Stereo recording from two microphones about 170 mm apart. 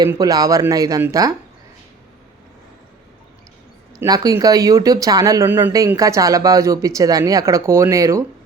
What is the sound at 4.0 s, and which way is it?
Speech, 20° right (ahead or behind).